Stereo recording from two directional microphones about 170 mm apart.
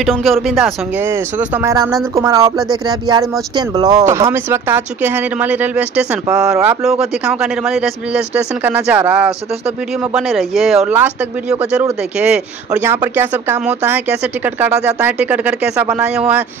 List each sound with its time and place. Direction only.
0.0 s a man's voice: centre (ahead or behind)
1.0 s a man's voice: 15° right (ahead or behind)